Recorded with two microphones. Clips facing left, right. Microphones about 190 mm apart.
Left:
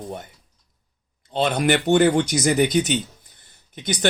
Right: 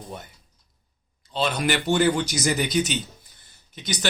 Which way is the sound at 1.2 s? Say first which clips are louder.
Left 4 dB; 55° left (ahead or behind).